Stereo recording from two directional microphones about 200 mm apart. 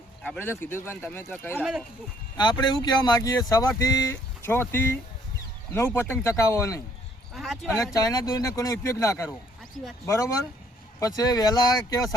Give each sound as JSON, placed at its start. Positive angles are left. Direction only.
{"t": 0.2, "sound": "speech", "side_deg": 10}
{"t": 2.4, "sound": "speech", "side_deg": 20}
{"t": 7.3, "sound": "speech", "side_deg": 0}
{"t": 7.9, "sound": "speech", "side_deg": 20}
{"t": 9.8, "sound": "speech", "side_deg": 0}
{"t": 10.1, "sound": "speech", "side_deg": 15}